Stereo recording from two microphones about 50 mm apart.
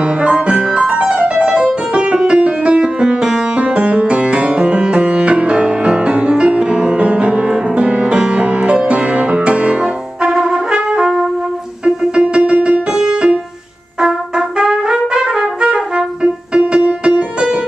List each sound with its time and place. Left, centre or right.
0.2 s music: right
10.2 s trumpet: centre
11.8 s music: right
14.6 s trumpet: centre